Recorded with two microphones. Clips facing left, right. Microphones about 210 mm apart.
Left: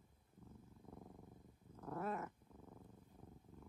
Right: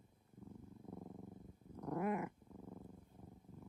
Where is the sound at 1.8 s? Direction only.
15° right (ahead or behind).